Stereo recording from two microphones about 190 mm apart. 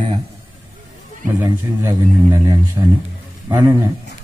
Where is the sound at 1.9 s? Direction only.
20° right (ahead or behind).